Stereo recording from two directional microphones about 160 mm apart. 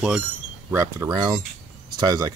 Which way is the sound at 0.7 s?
20° right (ahead or behind).